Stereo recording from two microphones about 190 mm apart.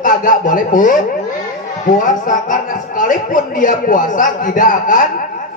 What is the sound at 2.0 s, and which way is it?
Speech, 45° left (ahead or behind).